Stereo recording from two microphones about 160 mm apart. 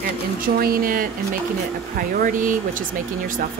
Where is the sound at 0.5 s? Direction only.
65° right (ahead or behind).